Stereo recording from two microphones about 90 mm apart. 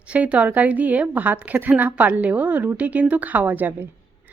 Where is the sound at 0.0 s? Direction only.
15° right (ahead or behind).